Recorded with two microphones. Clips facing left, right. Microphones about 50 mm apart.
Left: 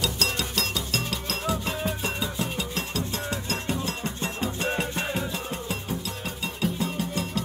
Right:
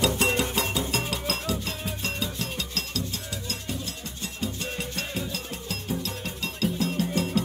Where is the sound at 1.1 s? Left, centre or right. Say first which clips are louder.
Right 1 dB; centre.